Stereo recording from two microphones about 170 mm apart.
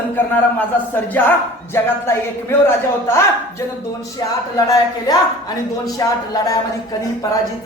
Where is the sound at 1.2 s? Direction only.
10° left (ahead or behind).